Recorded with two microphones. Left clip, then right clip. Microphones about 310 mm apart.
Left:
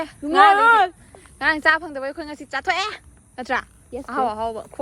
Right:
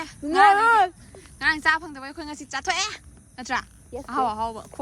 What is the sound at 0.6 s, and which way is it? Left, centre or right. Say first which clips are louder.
Speech: left 3 dB; centre.